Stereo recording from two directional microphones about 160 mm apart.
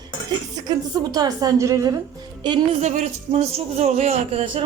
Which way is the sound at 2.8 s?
50° right (ahead or behind).